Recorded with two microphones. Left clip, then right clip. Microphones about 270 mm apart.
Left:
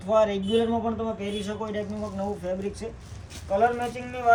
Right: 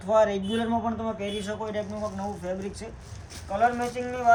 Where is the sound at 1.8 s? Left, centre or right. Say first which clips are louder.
Even; centre.